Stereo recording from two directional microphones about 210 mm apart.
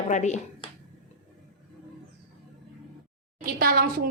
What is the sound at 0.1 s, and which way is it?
Speech, 35° left (ahead or behind).